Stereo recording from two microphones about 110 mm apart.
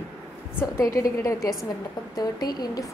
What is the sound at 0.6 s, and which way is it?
A woman's voice, 30° left (ahead or behind).